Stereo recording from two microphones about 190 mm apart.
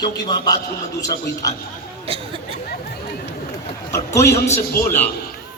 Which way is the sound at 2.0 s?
30° right (ahead or behind).